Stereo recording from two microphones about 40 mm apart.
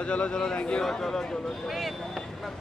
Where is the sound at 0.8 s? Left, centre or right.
Centre.